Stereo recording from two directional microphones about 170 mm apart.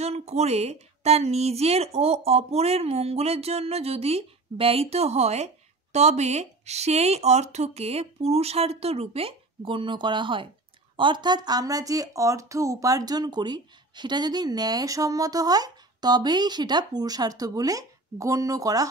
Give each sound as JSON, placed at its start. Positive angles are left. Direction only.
{"t": 0.0, "sound": "a woman's voice", "side_deg": -40}